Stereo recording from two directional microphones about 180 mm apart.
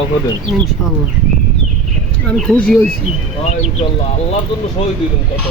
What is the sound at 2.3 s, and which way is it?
Speech, 5° left (ahead or behind).